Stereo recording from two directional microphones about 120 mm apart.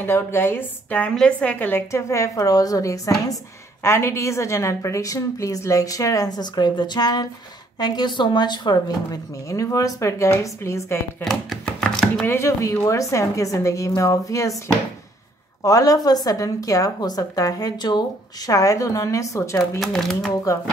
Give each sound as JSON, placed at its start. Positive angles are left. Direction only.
{"t": 0.0, "sound": "a woman's voice", "side_deg": 20}
{"t": 11.2, "sound": "a sound", "side_deg": 5}
{"t": 12.3, "sound": "a woman's voice", "side_deg": 25}
{"t": 15.6, "sound": "a woman's voice", "side_deg": 30}
{"t": 19.8, "sound": "speech", "side_deg": 5}